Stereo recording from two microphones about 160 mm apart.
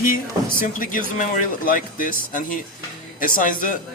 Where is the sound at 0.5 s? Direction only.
60° left (ahead or behind).